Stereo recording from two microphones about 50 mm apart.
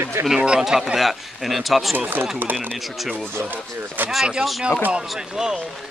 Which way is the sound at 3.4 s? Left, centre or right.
Right.